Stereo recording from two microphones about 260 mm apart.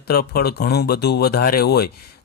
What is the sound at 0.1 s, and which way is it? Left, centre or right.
Speech, left.